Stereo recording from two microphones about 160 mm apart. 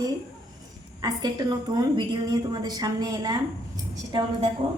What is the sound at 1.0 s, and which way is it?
A woman's voice, 25° right (ahead or behind).